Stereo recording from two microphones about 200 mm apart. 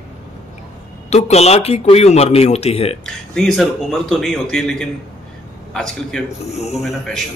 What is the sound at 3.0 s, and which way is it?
A man's voice, 5° left (ahead or behind).